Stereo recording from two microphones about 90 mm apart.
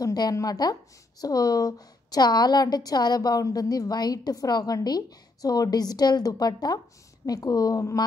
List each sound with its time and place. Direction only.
0.0 s a woman's voice: 45° left (ahead or behind)